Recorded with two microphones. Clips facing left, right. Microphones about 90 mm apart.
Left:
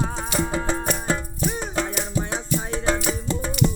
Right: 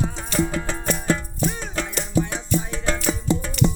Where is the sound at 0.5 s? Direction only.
15° left (ahead or behind).